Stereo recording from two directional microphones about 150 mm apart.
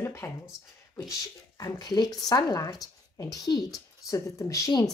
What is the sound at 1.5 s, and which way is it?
Speech, 25° left (ahead or behind).